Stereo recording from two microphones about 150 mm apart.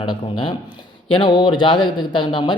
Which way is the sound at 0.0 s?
35° left (ahead or behind).